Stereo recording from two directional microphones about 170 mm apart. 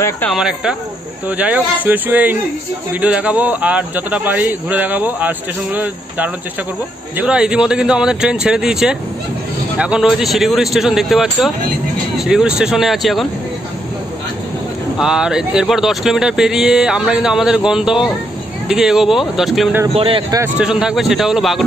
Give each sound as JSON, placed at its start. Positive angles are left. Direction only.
{"t": 0.3, "sound": "a man's voice", "side_deg": -5}
{"t": 15.0, "sound": "speech", "side_deg": -5}
{"t": 19.9, "sound": "speech", "side_deg": -35}
{"t": 20.3, "sound": "speech", "side_deg": -10}